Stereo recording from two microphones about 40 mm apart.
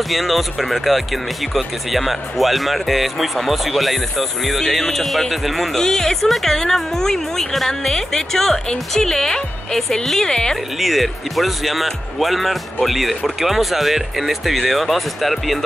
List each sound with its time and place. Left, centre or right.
0.1 s speech: centre
5.8 s speech: centre
10.3 s speech: centre
10.8 s speech: centre